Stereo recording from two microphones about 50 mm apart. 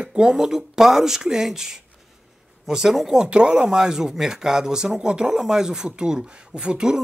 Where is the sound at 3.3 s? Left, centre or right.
Centre.